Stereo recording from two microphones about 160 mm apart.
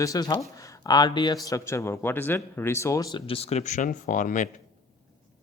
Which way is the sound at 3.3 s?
40° left (ahead or behind).